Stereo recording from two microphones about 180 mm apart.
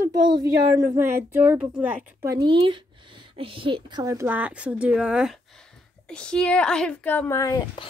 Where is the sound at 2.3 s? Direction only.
25° right (ahead or behind); by 7.6 s 15° left (ahead or behind).